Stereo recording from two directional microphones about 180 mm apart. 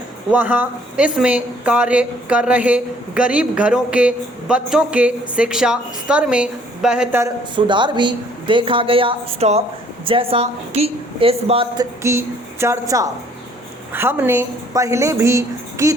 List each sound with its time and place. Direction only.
0.3 s speech: 10° right (ahead or behind)
7.5 s a woman's voice: 25° right (ahead or behind)
12.0 s speech: 15° right (ahead or behind)